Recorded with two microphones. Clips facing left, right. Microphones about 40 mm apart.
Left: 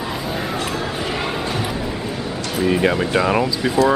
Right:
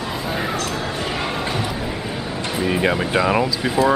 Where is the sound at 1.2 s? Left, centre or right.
Centre.